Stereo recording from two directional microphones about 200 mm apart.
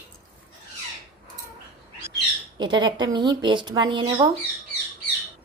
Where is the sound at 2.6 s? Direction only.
20° right (ahead or behind).